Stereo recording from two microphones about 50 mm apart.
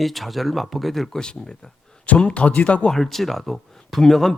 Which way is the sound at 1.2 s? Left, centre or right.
Centre.